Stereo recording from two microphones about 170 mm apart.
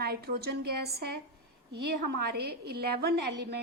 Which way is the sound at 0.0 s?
65° right (ahead or behind).